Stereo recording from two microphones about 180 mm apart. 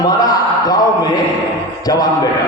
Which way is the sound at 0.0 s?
20° left (ahead or behind).